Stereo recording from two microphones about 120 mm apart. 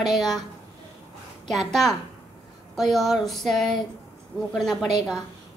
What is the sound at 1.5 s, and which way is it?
A child's voice, centre (ahead or behind).